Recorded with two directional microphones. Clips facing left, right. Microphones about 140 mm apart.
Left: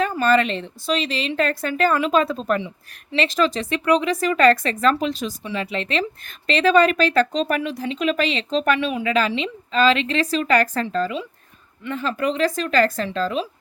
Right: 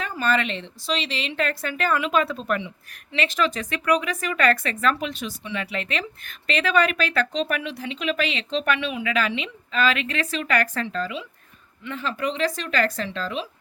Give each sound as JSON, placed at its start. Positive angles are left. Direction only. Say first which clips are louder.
{"t": 0.0, "sound": "a woman's voice", "louder": "left 6 dB", "side_deg": 40}